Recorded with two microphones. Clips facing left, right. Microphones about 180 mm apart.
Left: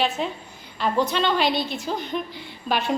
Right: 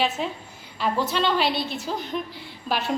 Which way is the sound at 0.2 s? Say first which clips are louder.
Left 1 dB; 5° right (ahead or behind).